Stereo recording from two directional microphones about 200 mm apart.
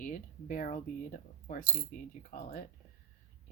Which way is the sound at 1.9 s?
45° left (ahead or behind).